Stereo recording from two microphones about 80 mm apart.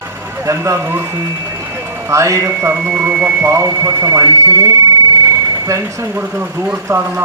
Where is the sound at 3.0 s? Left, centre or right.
Right.